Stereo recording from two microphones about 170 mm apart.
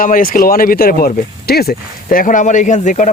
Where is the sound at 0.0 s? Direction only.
55° left (ahead or behind).